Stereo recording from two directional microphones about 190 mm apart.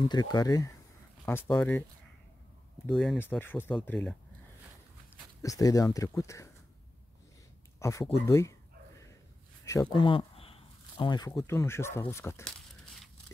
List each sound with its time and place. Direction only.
0.0 s speech: 20° left (ahead or behind)
2.9 s speech: centre (ahead or behind)
5.4 s speech: 15° left (ahead or behind)
7.8 s a sound: 15° left (ahead or behind)
9.7 s speech: 20° left (ahead or behind)